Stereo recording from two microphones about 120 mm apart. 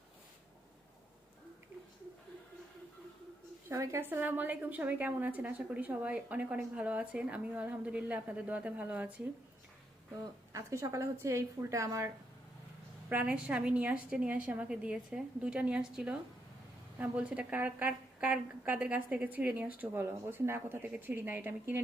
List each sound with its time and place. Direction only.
3.7 s a woman's voice: 20° right (ahead or behind)
10.5 s a woman's voice: 25° right (ahead or behind)
13.1 s a woman's voice: 10° right (ahead or behind)